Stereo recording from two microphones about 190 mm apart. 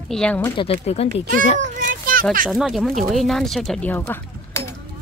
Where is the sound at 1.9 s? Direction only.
45° right (ahead or behind).